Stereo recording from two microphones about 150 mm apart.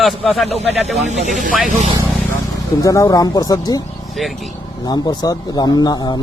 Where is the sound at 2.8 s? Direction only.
20° left (ahead or behind).